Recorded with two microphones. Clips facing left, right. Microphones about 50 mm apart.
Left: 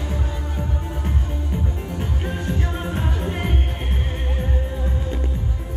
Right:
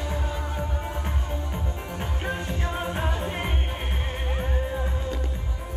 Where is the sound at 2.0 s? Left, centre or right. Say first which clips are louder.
Left 1 dB; centre.